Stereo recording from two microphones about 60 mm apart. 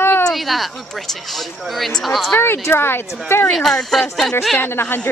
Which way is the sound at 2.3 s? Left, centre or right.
Left.